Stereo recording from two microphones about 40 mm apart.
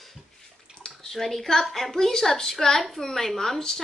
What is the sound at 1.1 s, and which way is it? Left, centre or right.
A woman's voice, centre.